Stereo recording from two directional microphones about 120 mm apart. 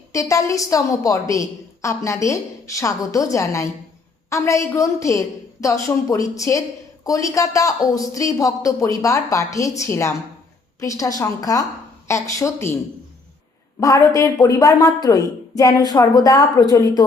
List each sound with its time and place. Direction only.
0.1 s a woman's voice: 25° left (ahead or behind)